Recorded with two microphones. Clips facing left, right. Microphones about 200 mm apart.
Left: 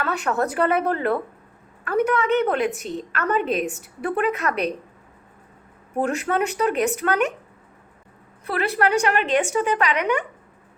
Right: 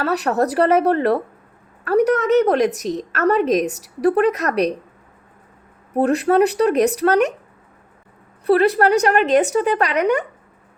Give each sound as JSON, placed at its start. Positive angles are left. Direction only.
{"t": 0.0, "sound": "a woman's voice", "side_deg": -40}
{"t": 5.9, "sound": "a woman's voice", "side_deg": -35}
{"t": 8.4, "sound": "a woman's voice", "side_deg": -35}